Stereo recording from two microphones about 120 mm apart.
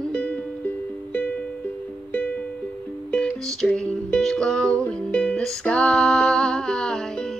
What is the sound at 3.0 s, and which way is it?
Music, 10° left (ahead or behind).